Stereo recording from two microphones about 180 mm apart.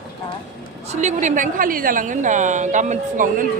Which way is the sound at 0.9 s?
40° right (ahead or behind).